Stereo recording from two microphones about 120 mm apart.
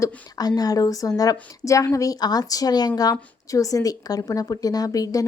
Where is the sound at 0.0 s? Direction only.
35° left (ahead or behind).